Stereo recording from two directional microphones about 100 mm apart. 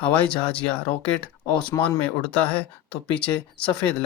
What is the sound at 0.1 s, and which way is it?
Speech, 15° left (ahead or behind).